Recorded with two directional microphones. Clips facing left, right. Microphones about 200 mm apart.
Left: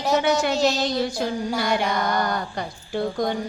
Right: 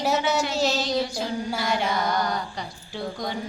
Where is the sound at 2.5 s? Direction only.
55° left (ahead or behind).